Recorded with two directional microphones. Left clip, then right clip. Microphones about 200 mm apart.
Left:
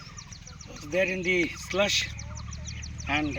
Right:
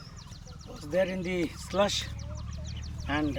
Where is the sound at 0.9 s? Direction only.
5° right (ahead or behind).